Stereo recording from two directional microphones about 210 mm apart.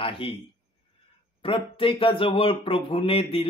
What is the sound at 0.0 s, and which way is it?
Speech, 25° left (ahead or behind).